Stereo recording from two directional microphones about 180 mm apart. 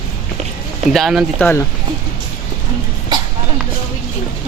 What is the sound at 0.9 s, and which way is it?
Speech, centre (ahead or behind).